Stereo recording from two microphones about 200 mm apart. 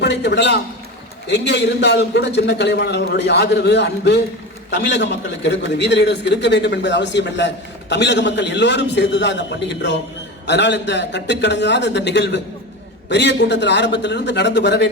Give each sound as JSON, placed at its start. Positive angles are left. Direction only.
{"t": 0.0, "sound": "a man's voice", "side_deg": 60}